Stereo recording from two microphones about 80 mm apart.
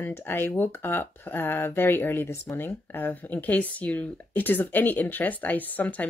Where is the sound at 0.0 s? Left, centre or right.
Left.